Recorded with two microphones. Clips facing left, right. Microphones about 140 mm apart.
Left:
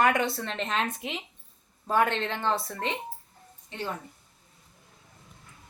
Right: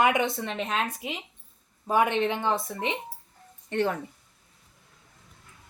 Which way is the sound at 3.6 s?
70° right (ahead or behind).